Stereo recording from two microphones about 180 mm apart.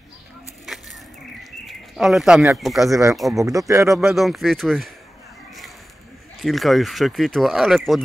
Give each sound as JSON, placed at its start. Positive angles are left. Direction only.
{"t": 1.4, "sound": "bird", "side_deg": 0}
{"t": 2.6, "sound": "speech", "side_deg": 0}
{"t": 2.9, "sound": "speech", "side_deg": -15}
{"t": 3.9, "sound": "speech", "side_deg": 0}
{"t": 6.4, "sound": "speech", "side_deg": 0}